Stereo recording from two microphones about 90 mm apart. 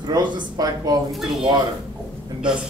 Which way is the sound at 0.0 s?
55° right (ahead or behind).